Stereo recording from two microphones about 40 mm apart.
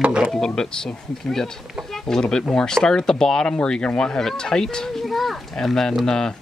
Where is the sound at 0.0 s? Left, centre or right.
Right.